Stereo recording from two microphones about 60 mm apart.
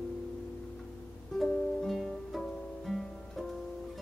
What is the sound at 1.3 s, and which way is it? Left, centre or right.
Music, centre.